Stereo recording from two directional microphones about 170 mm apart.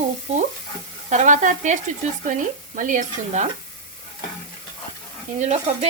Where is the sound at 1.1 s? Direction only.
45° right (ahead or behind).